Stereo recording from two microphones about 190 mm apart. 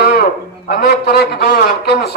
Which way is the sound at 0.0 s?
60° left (ahead or behind).